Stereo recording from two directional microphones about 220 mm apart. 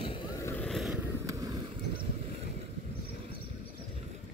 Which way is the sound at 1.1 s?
15° right (ahead or behind).